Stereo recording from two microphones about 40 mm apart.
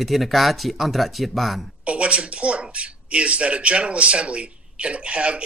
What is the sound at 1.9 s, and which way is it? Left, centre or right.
Speech, right.